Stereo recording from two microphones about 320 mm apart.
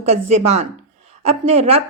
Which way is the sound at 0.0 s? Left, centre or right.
Centre.